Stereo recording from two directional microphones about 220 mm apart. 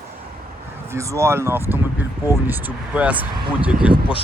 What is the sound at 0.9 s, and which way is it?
Speech, 15° right (ahead or behind).